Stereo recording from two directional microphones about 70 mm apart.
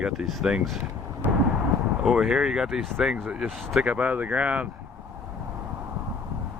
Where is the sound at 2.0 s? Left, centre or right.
Centre.